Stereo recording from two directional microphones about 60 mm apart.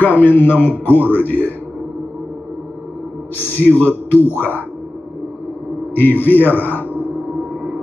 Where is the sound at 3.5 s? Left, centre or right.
Left.